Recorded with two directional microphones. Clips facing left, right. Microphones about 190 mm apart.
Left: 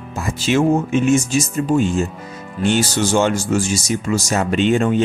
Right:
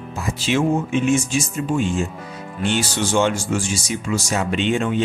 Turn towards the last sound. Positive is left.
turn(degrees=45)  # may be behind; listen again after turning